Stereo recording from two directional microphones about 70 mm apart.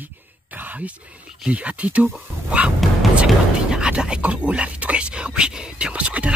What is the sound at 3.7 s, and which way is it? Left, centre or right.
Speech, centre.